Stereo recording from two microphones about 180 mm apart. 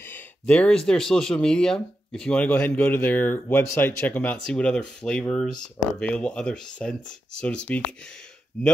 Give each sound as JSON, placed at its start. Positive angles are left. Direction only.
{"t": 0.0, "sound": "speech", "side_deg": 10}